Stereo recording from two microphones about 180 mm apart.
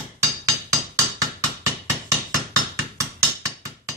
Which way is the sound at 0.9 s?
20° right (ahead or behind).